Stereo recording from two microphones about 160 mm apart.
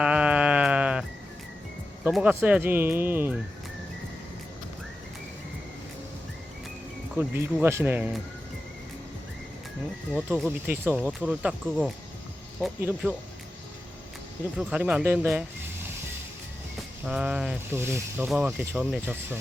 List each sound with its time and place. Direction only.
0.0 s sheep: 5° right (ahead or behind)
2.0 s speech: 10° right (ahead or behind)
7.2 s speech: 15° right (ahead or behind)
10.1 s speech: 5° right (ahead or behind)
14.5 s speech: 5° right (ahead or behind)
17.1 s speech: 5° right (ahead or behind)
17.7 s speech: 15° right (ahead or behind)
18.3 s speech: 5° right (ahead or behind)